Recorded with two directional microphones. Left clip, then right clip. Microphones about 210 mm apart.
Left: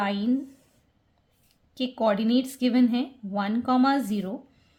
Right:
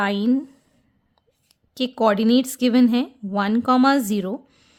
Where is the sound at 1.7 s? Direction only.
50° right (ahead or behind).